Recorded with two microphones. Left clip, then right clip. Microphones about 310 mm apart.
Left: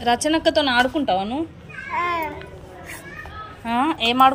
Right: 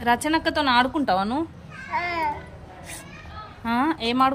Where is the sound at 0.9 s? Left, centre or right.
Right.